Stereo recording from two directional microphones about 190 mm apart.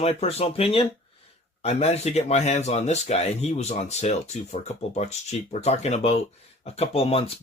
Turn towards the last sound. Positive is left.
turn(degrees=30)  # may be behind; listen again after turning